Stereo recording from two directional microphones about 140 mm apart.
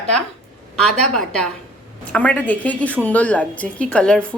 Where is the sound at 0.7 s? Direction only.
5° left (ahead or behind).